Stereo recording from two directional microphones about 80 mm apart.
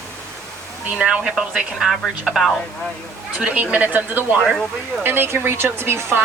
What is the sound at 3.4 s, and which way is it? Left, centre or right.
A woman's voice, centre.